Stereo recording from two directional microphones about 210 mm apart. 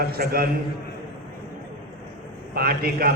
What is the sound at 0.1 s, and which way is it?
Speech, 45° right (ahead or behind).